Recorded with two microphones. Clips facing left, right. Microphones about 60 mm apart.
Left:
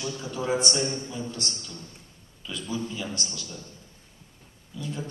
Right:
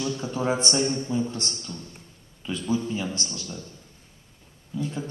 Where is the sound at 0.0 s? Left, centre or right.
Right.